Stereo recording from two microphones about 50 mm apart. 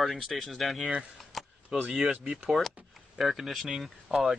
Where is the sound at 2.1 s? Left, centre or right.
Right.